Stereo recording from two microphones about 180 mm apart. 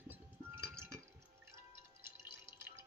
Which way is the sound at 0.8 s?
15° right (ahead or behind).